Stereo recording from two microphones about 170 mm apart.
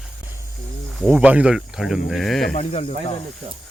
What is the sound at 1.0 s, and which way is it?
Speech, 5° right (ahead or behind).